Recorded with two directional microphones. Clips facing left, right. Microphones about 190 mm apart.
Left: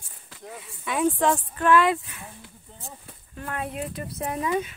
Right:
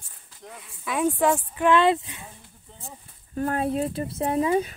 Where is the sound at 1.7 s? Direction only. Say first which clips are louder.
Even; 25° right (ahead or behind).